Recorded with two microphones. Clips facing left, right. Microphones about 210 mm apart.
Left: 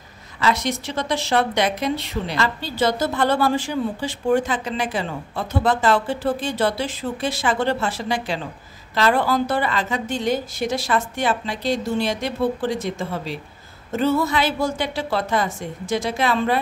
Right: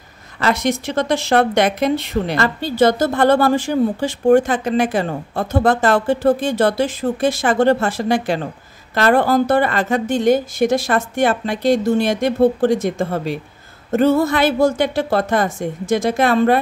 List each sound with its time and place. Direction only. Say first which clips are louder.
0.4 s speech: right 4 dB; 50° right (ahead or behind)